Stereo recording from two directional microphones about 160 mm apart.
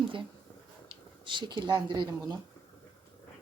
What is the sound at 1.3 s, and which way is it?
Speech, 30° right (ahead or behind).